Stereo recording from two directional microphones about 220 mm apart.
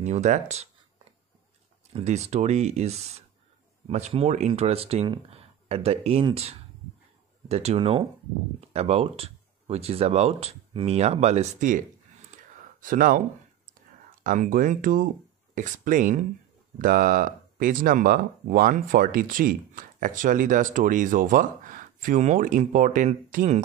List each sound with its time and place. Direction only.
0.0 s speech: 30° right (ahead or behind)
2.0 s speech: 30° right (ahead or behind)
12.8 s speech: 40° right (ahead or behind)
14.2 s speech: 35° right (ahead or behind)